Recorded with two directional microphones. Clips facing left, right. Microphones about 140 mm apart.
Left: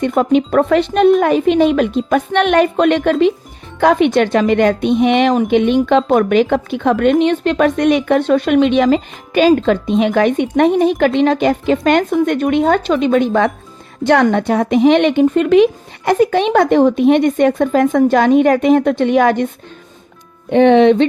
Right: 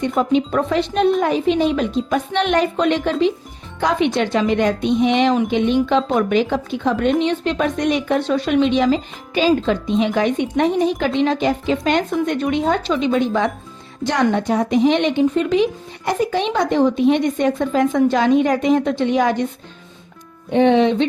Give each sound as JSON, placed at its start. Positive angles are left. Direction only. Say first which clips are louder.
{"t": 0.0, "sound": "a woman's voice", "louder": "left 4 dB", "side_deg": 60}
{"t": 20.5, "sound": "a woman's voice", "louder": "left 5 dB", "side_deg": 65}